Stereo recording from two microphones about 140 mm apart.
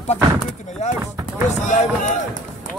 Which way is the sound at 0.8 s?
55° left (ahead or behind).